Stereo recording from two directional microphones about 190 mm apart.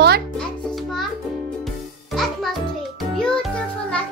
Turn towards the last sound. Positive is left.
turn(degrees=5)  # may be behind; listen again after turning